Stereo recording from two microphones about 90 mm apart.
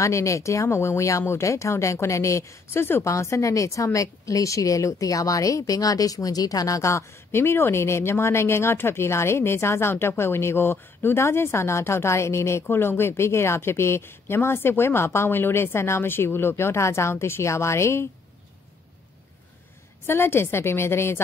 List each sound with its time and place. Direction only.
0.0 s speech: 35° left (ahead or behind)
20.1 s speech: 25° left (ahead or behind)